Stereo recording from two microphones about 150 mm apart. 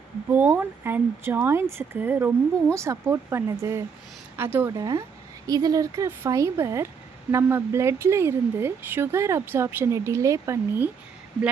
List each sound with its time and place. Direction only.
0.3 s a woman's voice: 15° right (ahead or behind)
4.8 s a woman's voice: 25° right (ahead or behind)